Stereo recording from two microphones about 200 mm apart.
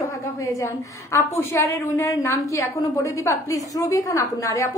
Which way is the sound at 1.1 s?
15° left (ahead or behind).